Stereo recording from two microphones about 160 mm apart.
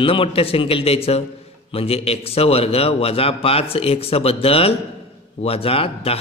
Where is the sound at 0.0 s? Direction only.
35° left (ahead or behind).